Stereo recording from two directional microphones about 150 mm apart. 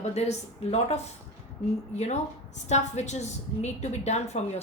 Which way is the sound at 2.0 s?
50° left (ahead or behind).